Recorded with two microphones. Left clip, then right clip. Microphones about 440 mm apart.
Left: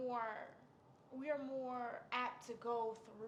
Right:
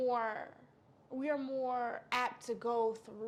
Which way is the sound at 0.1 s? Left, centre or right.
Right.